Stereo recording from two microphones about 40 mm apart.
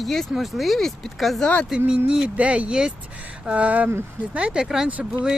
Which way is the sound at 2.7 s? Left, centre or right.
Centre.